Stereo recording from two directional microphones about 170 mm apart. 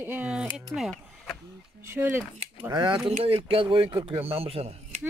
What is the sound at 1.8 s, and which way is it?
Speech, 15° right (ahead or behind).